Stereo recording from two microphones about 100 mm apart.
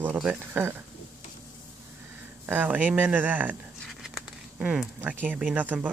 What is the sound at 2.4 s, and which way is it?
Speech, 20° right (ahead or behind).